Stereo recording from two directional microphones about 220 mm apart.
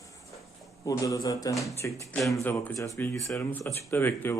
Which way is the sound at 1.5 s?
Centre (ahead or behind).